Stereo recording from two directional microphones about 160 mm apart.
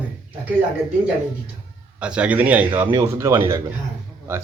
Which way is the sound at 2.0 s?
5° right (ahead or behind).